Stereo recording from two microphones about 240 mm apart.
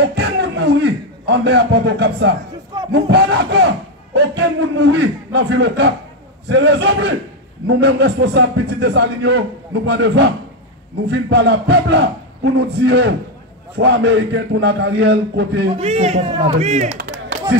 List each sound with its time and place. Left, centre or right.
0.0 s a sound: right
2.9 s speech: right
15.8 s a man's voice: right
16.5 s clapping: right